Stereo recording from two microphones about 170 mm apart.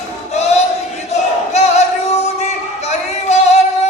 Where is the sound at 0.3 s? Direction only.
40° left (ahead or behind).